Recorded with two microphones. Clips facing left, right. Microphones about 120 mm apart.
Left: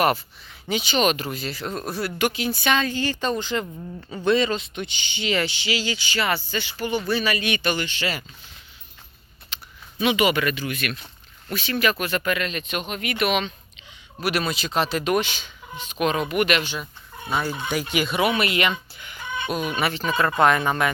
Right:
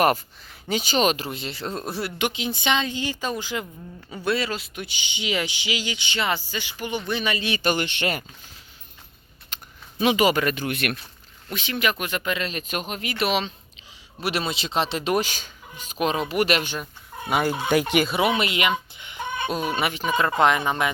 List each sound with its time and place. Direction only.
0.7 s speech: 40° right (ahead or behind)
7.6 s speech: 50° right (ahead or behind)
9.5 s a sound: 50° right (ahead or behind)
10.0 s speech: 40° right (ahead or behind); by 10.9 s 60° right (ahead or behind)
11.5 s speech: 20° right (ahead or behind)
12.5 s speech: 40° right (ahead or behind)
17.2 s speech: 75° right (ahead or behind)
18.0 s speech: 25° right (ahead or behind)
19.5 s speech: 30° right (ahead or behind)
19.9 s speech: 10° right (ahead or behind)